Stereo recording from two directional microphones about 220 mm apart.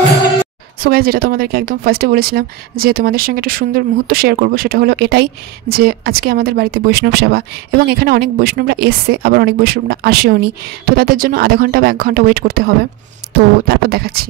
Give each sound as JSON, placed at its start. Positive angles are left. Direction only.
{"t": 0.7, "sound": "speech", "side_deg": -45}